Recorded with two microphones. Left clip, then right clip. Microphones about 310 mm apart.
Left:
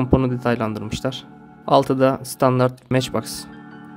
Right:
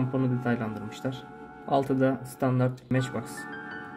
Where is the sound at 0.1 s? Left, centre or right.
Left.